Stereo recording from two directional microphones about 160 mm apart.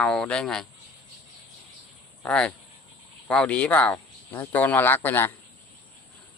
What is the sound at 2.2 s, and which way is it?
Speech, 5° left (ahead or behind).